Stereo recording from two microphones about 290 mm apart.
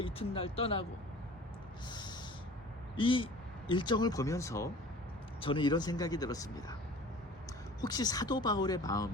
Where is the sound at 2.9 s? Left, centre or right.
Centre.